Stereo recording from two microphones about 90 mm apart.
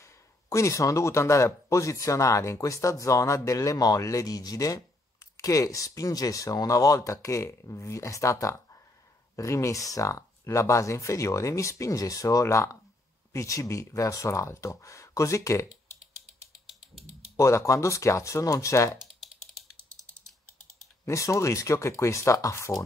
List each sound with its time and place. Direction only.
0.0 s speech: 35° left (ahead or behind)
17.4 s speech: 35° left (ahead or behind)
19.2 s ratchet: centre (ahead or behind)
21.0 s speech: 35° left (ahead or behind)